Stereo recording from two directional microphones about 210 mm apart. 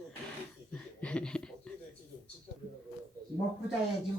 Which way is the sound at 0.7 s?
5° left (ahead or behind).